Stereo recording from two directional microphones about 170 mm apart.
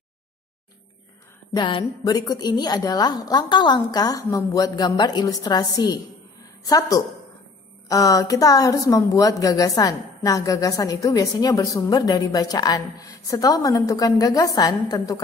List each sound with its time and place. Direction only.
1.5 s a woman's voice: 30° left (ahead or behind)